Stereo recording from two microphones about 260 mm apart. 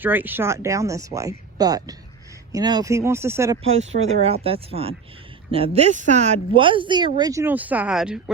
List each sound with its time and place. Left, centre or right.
0.0 s speech: centre
3.6 s speech: right; by 8.2 s centre